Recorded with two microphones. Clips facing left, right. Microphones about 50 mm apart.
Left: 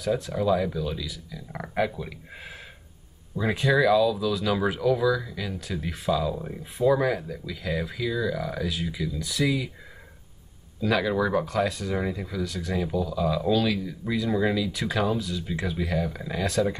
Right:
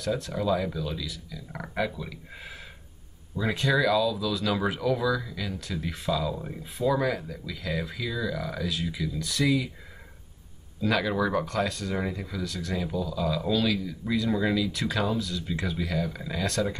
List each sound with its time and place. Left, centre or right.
0.0 s speech: centre
10.8 s speech: centre